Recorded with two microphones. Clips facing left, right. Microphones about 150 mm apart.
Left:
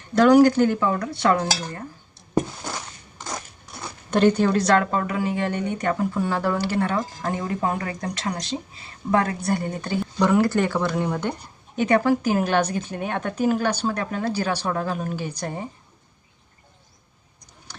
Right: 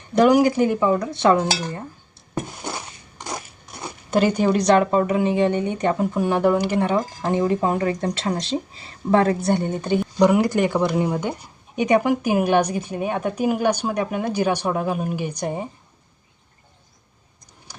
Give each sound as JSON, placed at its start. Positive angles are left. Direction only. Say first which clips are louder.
{"t": 0.1, "sound": "speech", "louder": "left 1 dB", "side_deg": -15}
{"t": 0.8, "sound": "speech", "louder": "right 3 dB", "side_deg": -20}
{"t": 2.6, "sound": "a sound", "louder": "right 2 dB", "side_deg": -15}
{"t": 3.2, "sound": "biting", "louder": "right 2 dB", "side_deg": -20}
{"t": 4.1, "sound": "speech", "louder": "even", "side_deg": -10}